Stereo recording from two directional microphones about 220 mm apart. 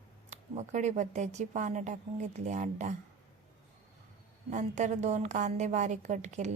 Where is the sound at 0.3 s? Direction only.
30° right (ahead or behind).